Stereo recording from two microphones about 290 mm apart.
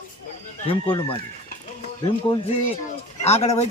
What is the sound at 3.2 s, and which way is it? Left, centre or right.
Speech, left.